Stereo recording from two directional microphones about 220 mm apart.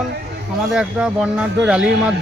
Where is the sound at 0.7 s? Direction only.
5° right (ahead or behind).